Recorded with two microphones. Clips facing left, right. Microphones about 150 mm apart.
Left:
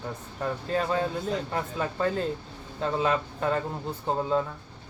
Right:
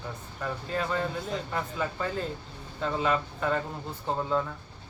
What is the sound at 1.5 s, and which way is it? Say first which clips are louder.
Speech: left 2 dB; 40° left (ahead or behind).